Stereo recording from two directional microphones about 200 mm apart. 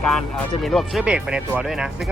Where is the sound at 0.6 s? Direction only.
Centre (ahead or behind).